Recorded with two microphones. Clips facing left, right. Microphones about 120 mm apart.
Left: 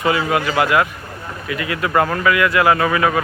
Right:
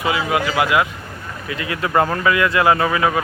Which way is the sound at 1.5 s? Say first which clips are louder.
Left 2 dB; 25° right (ahead or behind).